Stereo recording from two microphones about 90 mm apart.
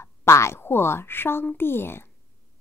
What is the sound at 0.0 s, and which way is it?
Speech, 30° left (ahead or behind).